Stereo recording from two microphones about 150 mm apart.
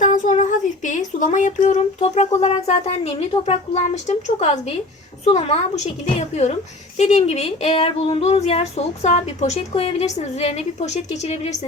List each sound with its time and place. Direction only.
0.0 s a woman's voice: 55° left (ahead or behind)